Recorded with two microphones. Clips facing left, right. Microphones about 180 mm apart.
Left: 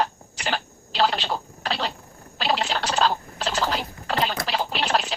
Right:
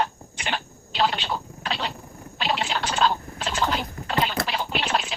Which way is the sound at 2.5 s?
40° left (ahead or behind).